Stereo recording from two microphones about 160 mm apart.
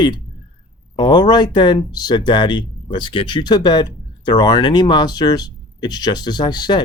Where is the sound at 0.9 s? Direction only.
30° left (ahead or behind).